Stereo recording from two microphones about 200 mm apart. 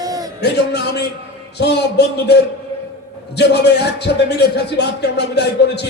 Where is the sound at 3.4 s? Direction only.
55° left (ahead or behind).